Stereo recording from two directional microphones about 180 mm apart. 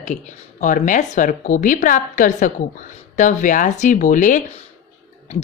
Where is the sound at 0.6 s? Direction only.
45° left (ahead or behind).